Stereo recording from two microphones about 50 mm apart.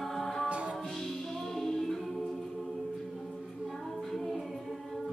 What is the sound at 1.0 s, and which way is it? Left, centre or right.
Music, centre.